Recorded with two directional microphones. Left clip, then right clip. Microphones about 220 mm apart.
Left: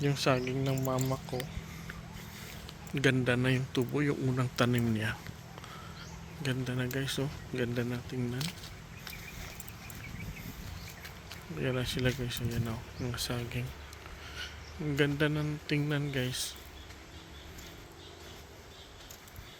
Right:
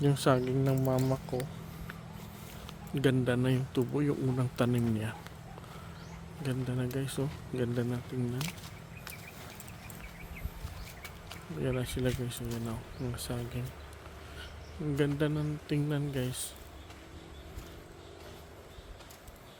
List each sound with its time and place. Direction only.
0.0 s speech: 25° right (ahead or behind)
2.9 s a man's voice: 10° right (ahead or behind)
6.4 s a man's voice: 5° right (ahead or behind)
11.0 s speech: 5° right (ahead or behind)
14.9 s speech: 5° right (ahead or behind)